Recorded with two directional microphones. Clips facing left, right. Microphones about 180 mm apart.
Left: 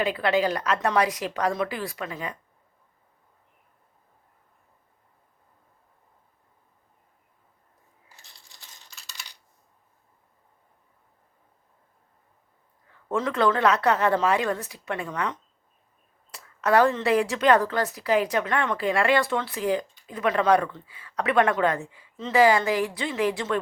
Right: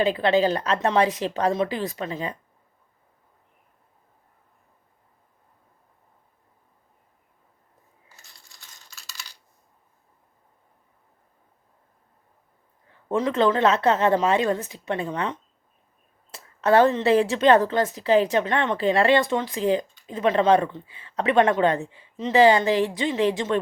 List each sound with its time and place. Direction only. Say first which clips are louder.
0.0 s a woman's voice: right 3 dB; 25° right (ahead or behind)
8.9 s computer keyboard: right 1 dB; 15° left (ahead or behind)
12.9 s a woman's voice: right 3 dB; 20° right (ahead or behind)